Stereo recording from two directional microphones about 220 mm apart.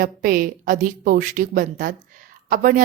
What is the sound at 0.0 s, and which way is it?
A woman's voice, 40° right (ahead or behind).